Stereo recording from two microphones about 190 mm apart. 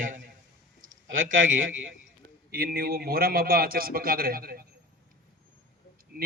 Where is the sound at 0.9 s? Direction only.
90° right.